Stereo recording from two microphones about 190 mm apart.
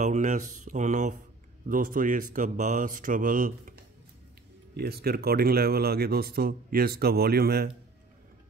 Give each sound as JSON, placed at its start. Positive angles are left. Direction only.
{"t": 0.0, "sound": "speech", "side_deg": -40}